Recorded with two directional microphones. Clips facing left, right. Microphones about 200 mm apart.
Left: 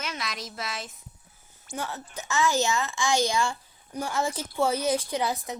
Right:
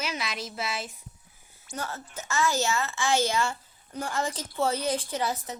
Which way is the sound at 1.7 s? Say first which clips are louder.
Left 1 dB; 15° left (ahead or behind).